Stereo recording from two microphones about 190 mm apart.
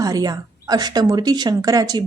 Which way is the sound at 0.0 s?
20° right (ahead or behind).